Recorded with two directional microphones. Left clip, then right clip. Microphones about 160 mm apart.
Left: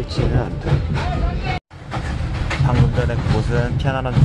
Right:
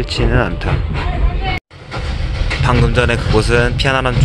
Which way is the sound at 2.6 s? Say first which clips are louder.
Right 9 dB; 10° right (ahead or behind).